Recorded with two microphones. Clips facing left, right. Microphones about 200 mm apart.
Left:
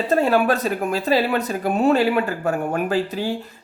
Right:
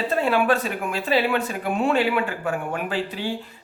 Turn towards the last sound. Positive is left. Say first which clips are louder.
# left 5 dB
turn(degrees=40)  # may be behind; listen again after turning